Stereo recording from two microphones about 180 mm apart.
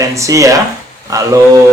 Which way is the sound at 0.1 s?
15° right (ahead or behind).